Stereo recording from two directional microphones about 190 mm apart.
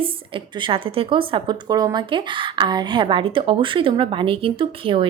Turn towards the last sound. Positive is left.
turn(degrees=-25)  # may be behind; listen again after turning